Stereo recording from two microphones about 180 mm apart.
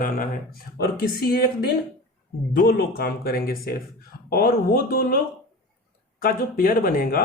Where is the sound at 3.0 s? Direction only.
55° left (ahead or behind).